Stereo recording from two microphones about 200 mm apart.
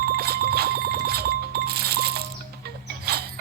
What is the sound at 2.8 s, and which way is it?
Creak, 50° right (ahead or behind).